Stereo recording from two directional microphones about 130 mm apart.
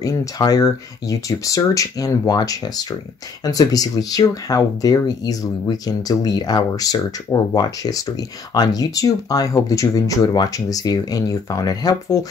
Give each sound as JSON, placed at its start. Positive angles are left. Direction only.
{"t": 0.0, "sound": "speech", "side_deg": 25}